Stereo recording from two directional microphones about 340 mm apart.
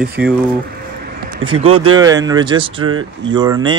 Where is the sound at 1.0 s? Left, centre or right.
Right.